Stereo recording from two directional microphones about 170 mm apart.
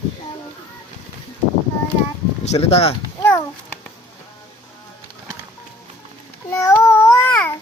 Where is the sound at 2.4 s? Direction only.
40° left (ahead or behind).